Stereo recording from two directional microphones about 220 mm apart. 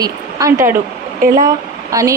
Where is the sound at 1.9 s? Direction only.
15° right (ahead or behind).